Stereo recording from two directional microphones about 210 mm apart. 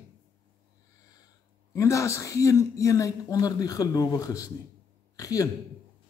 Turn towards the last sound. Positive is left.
turn(degrees=15)  # may be behind; listen again after turning